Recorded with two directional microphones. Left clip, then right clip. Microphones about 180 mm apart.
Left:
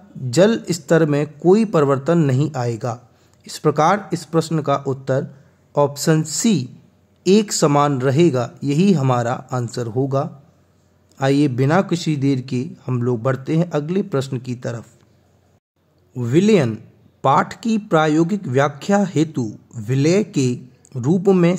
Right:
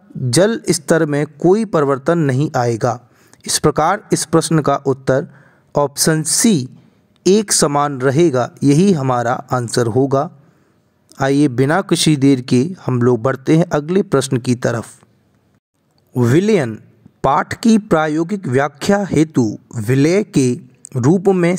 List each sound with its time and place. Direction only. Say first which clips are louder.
0.3 s speech: right 2 dB; 35° right (ahead or behind)
16.2 s speech: right 2 dB; 40° right (ahead or behind)